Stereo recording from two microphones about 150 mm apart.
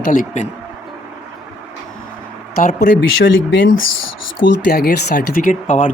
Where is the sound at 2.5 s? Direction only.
65° left (ahead or behind).